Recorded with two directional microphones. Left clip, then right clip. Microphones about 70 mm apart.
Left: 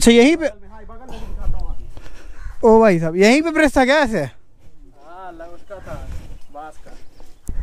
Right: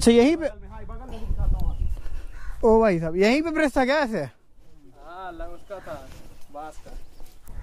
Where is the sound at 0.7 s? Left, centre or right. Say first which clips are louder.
Left 2 dB; right.